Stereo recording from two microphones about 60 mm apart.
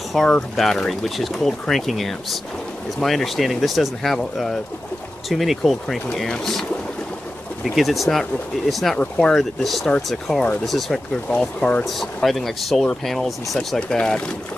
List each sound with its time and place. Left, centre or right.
0.1 s speech: centre
7.6 s speech: centre
11.3 s speech: centre
11.8 s speech: centre
13.7 s speech: centre